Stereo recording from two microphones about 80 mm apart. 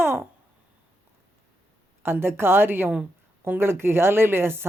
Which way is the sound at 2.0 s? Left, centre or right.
Right.